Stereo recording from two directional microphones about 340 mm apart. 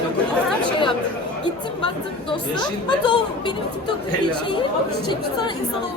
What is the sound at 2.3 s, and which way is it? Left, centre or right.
Speech, centre.